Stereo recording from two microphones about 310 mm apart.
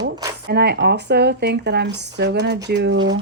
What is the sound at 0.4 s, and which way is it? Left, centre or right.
Speech, right.